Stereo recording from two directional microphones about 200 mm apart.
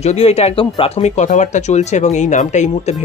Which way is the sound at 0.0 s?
30° left (ahead or behind).